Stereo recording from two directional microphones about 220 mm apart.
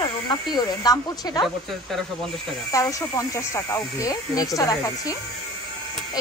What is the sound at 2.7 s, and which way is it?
Speech, 15° left (ahead or behind).